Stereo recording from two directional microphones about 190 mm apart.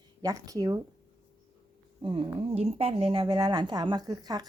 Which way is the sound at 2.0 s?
30° right (ahead or behind).